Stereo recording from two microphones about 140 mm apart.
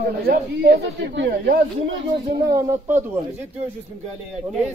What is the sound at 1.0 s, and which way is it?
Speech, 90° right.